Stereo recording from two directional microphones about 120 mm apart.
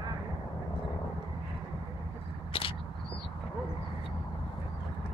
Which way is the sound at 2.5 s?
50° left (ahead or behind).